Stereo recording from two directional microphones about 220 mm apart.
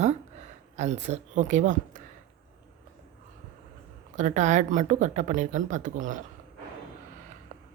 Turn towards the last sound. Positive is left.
turn(degrees=-35)  # may be behind; listen again after turning